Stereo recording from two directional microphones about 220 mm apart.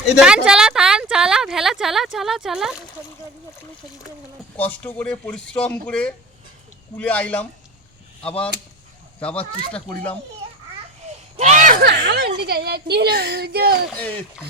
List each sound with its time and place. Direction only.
0.0 s speech: 5° right (ahead or behind)
4.8 s speech: 5° left (ahead or behind)
11.3 s a woman's voice: 35° right (ahead or behind)
13.9 s speech: 5° left (ahead or behind)